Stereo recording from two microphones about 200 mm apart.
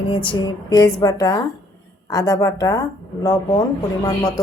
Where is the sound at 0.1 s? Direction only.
25° left (ahead or behind).